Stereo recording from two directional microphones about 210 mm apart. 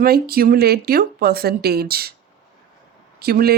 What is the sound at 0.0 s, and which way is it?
Speech, 45° right (ahead or behind).